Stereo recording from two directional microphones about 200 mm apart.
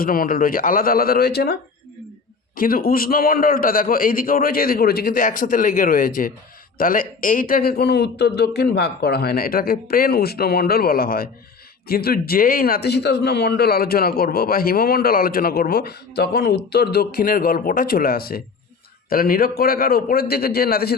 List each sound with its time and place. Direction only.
0.0 s a man's voice: 45° left (ahead or behind)
2.6 s a man's voice: 45° left (ahead or behind)